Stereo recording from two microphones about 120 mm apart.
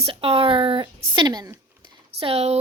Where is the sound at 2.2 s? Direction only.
55° right (ahead or behind).